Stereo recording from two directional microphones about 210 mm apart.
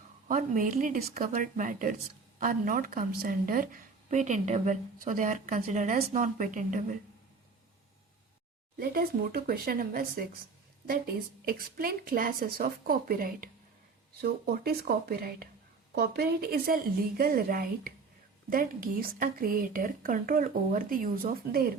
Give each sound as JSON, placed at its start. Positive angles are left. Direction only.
{"t": 0.3, "sound": "a woman's voice", "side_deg": -40}
{"t": 8.8, "sound": "a woman's voice", "side_deg": -45}